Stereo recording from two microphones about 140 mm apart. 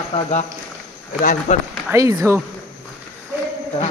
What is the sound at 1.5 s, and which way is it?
Speech, 55° left (ahead or behind).